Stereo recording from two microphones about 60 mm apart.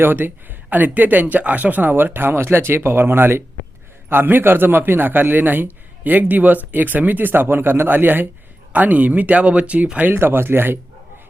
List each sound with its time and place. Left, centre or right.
0.0 s speech: right
10.1 s speech: right